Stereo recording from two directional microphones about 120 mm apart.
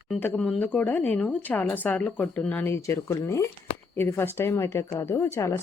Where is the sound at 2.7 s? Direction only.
25° left (ahead or behind).